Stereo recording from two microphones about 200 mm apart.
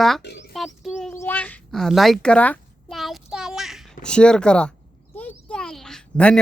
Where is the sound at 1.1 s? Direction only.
10° left (ahead or behind).